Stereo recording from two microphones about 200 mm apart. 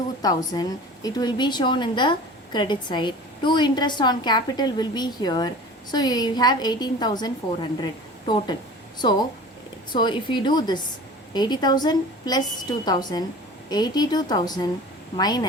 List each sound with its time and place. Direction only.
0.2 s a woman's voice: 20° left (ahead or behind)
9.0 s a woman's voice: 20° left (ahead or behind)